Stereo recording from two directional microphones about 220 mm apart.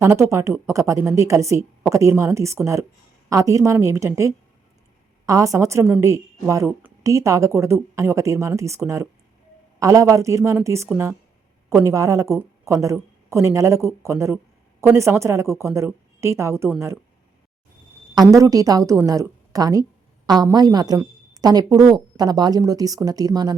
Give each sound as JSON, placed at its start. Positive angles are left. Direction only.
{"t": 0.0, "sound": "a woman's voice", "side_deg": -10}
{"t": 18.1, "sound": "a woman's voice", "side_deg": -15}